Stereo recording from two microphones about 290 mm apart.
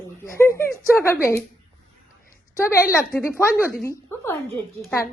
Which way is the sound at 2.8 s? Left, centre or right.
Centre.